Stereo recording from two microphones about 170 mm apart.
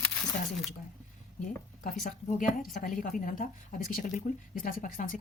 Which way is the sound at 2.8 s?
50° left (ahead or behind).